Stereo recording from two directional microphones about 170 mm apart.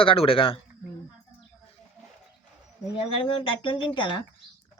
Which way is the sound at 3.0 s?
30° left (ahead or behind).